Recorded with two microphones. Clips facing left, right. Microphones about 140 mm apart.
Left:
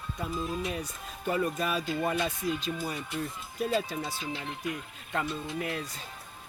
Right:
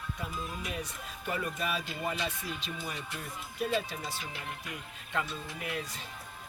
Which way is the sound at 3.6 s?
40° left (ahead or behind).